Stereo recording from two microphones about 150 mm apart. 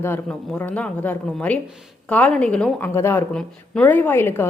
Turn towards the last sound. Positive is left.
turn(degrees=15)  # may be behind; listen again after turning